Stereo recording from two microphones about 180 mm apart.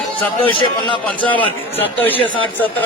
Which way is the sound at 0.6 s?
25° left (ahead or behind).